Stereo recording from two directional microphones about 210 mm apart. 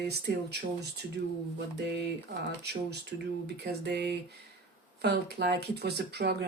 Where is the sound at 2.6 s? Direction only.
50° right (ahead or behind).